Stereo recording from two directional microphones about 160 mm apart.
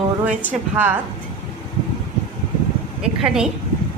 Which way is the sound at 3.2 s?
5° right (ahead or behind).